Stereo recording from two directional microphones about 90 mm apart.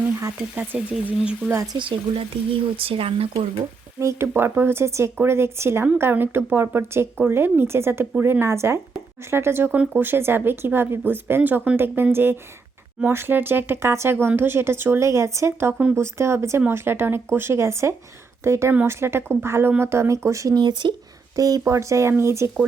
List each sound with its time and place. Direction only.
0.5 s speech: 20° right (ahead or behind)
1.8 s speech: 90° right
4.0 s speech: 30° right (ahead or behind)
20.6 s speech: 55° right (ahead or behind)
21.3 s speech: 40° right (ahead or behind)